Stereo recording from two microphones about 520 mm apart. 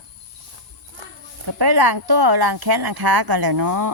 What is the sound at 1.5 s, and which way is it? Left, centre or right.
Speech, right.